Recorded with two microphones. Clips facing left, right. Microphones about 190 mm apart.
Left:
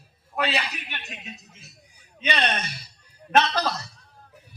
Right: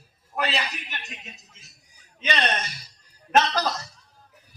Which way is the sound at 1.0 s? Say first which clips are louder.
Left 3 dB; 60° left (ahead or behind).